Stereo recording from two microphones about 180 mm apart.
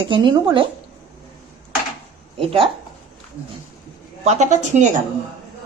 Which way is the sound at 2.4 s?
30° right (ahead or behind).